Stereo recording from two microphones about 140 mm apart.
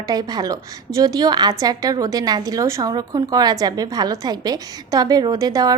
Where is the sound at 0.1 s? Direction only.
30° right (ahead or behind).